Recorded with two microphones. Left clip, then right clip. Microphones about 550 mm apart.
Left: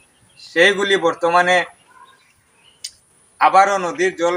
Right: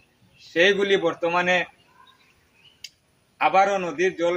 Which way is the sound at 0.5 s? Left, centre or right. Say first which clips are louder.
Left 5 dB; right.